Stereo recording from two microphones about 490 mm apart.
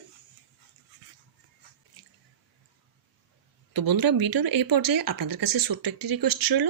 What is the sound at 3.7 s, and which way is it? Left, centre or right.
Speech, right.